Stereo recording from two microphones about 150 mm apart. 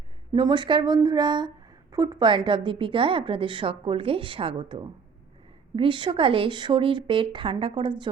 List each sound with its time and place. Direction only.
0.3 s a woman's voice: 30° right (ahead or behind)